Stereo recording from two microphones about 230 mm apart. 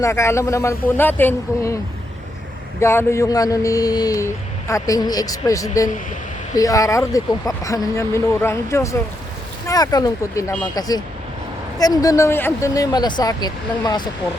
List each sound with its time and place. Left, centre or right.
0.0 s speech: centre
2.8 s speech: centre